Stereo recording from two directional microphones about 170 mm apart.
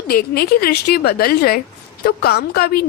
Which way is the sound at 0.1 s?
65° left (ahead or behind).